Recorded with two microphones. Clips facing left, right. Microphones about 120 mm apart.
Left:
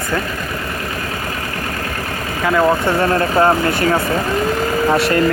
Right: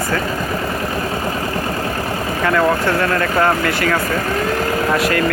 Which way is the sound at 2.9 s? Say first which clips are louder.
Left 2 dB; 25° left (ahead or behind).